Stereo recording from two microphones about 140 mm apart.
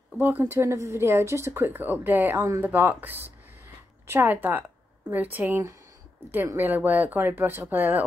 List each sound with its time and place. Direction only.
0.2 s speech: 15° right (ahead or behind)